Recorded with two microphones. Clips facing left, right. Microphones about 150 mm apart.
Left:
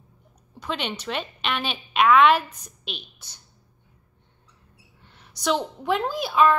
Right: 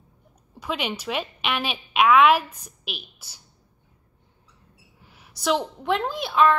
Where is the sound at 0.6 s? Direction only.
5° right (ahead or behind).